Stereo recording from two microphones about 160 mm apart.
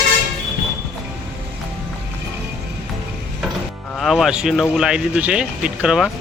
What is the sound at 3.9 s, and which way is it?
Speech, centre (ahead or behind).